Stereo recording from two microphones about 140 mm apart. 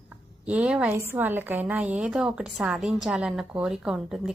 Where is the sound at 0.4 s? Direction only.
10° right (ahead or behind).